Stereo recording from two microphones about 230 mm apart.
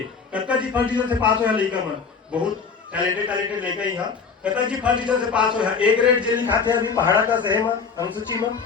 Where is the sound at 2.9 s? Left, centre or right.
Centre.